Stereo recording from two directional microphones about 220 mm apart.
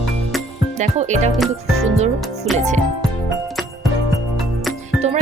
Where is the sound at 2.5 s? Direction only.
30° right (ahead or behind).